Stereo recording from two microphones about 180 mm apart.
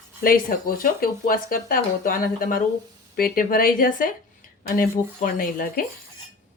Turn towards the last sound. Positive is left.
turn(degrees=50)  # may be behind; listen again after turning